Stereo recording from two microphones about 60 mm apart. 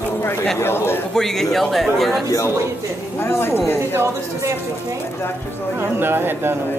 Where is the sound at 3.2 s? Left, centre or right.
Left.